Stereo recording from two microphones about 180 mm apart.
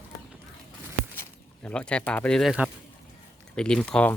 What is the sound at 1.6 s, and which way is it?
Speech, 5° left (ahead or behind).